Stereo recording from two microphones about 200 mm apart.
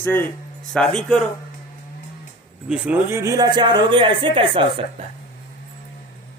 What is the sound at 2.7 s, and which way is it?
Speech, 10° right (ahead or behind).